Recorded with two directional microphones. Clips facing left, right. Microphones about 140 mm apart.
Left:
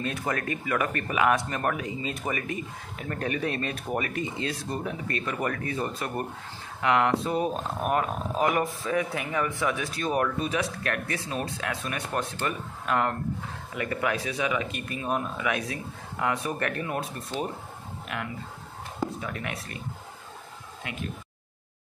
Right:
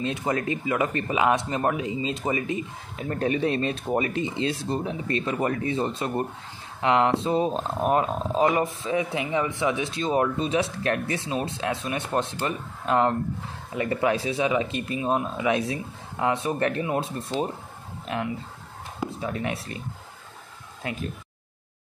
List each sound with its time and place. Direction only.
0.0 s speech: 20° right (ahead or behind)
20.8 s speech: 35° right (ahead or behind)